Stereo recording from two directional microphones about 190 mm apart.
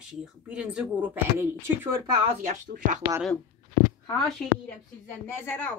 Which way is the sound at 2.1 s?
35° right (ahead or behind).